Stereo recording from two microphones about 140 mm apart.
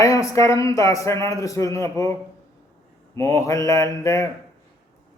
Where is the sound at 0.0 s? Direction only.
25° left (ahead or behind).